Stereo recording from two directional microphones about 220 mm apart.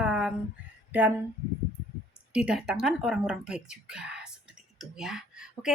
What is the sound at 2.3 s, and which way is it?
Speech, 5° right (ahead or behind).